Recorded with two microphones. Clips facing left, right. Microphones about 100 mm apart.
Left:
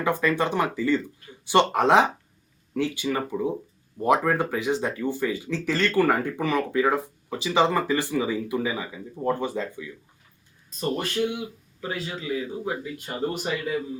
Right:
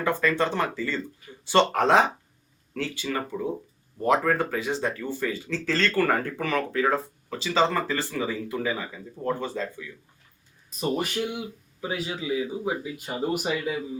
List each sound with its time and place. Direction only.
0.0 s speech: 15° left (ahead or behind)
10.8 s speech: 5° right (ahead or behind)